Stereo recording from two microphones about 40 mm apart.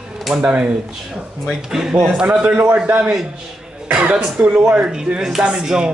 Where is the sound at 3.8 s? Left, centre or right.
Right.